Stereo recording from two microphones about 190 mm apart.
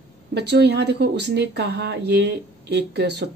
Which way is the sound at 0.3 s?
60° right (ahead or behind).